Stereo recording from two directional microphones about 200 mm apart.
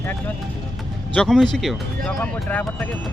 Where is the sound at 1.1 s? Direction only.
5° left (ahead or behind).